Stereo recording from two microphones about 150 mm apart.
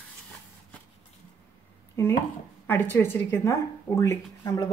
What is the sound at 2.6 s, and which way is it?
Speech, 10° left (ahead or behind).